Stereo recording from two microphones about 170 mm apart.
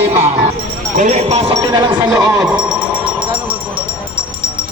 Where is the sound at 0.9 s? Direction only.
45° right (ahead or behind); by 2.1 s 25° right (ahead or behind).